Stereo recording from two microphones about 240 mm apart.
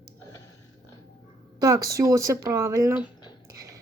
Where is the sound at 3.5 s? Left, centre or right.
Centre.